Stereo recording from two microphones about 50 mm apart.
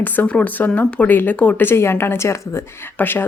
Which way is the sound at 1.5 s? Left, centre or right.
Left.